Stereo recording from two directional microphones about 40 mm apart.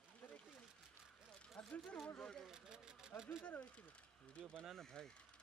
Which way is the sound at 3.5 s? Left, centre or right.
Left.